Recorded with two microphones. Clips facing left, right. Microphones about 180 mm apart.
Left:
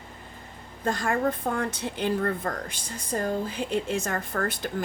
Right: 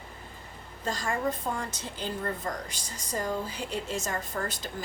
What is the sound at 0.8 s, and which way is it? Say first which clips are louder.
A woman's voice: left 5 dB; 55° left (ahead or behind).